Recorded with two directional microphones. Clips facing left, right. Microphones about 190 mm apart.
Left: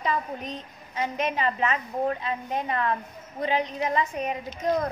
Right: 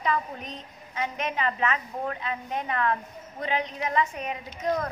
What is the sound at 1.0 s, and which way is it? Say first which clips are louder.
A woman's voice: left 3 dB; 35° left (ahead or behind).